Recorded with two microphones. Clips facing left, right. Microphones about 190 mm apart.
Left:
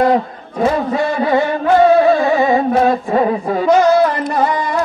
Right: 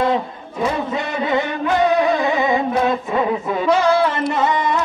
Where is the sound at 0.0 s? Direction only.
45° left (ahead or behind).